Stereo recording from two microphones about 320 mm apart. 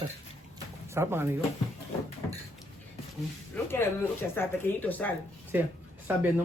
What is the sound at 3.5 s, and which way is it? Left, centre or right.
A woman's voice, centre.